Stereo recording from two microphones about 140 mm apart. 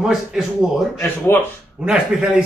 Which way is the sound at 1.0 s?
15° left (ahead or behind).